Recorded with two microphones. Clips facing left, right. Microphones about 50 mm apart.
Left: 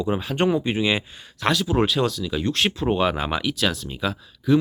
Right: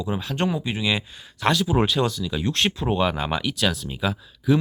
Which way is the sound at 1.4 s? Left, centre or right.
Centre.